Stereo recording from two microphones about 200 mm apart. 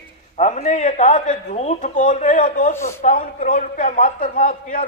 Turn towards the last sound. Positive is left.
turn(degrees=40)  # may be behind; listen again after turning